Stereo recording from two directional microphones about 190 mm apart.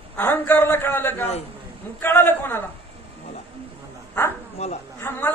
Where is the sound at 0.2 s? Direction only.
10° left (ahead or behind).